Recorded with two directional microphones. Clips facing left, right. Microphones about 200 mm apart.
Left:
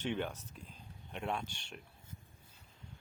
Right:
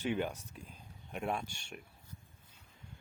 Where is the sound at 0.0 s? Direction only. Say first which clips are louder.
Right 2 dB; 10° right (ahead or behind).